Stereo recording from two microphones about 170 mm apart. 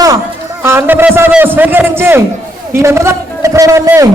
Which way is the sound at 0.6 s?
15° right (ahead or behind).